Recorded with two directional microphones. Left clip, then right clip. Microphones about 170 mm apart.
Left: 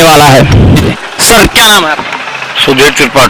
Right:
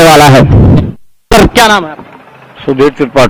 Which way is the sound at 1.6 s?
15° left (ahead or behind).